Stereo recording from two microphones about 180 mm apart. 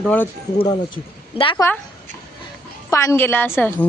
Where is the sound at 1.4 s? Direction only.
30° left (ahead or behind).